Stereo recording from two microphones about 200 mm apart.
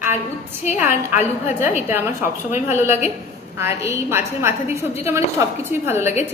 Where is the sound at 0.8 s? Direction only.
10° right (ahead or behind).